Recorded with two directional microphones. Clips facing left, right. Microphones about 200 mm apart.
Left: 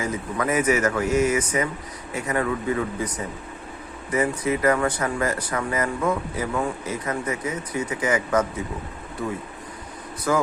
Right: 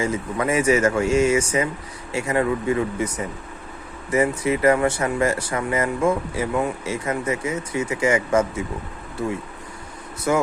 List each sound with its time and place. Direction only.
0.0 s speech: 25° right (ahead or behind)
4.1 s speech: 25° right (ahead or behind)
10.3 s speech: 25° right (ahead or behind)